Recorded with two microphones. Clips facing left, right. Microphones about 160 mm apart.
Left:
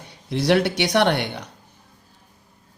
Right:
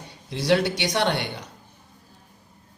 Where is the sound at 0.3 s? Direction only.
60° left (ahead or behind).